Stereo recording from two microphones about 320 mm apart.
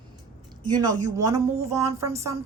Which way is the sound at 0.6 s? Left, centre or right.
Centre.